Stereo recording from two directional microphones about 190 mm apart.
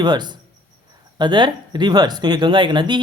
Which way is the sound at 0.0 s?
20° right (ahead or behind).